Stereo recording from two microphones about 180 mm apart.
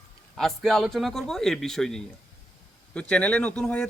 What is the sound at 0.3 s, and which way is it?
Speech, centre (ahead or behind).